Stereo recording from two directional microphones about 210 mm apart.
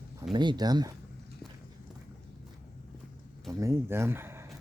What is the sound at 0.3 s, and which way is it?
Speech, 20° right (ahead or behind).